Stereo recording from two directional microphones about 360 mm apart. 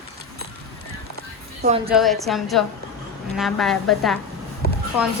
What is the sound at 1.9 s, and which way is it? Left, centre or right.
A woman's voice, centre.